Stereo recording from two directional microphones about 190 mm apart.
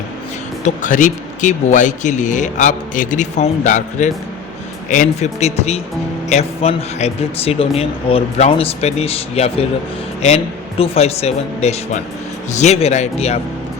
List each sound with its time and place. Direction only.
0.6 s speech: 40° left (ahead or behind)